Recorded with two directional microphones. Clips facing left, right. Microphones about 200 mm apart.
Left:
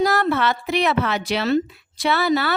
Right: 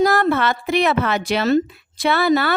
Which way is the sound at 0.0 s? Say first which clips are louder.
Right 3 dB; 50° right (ahead or behind).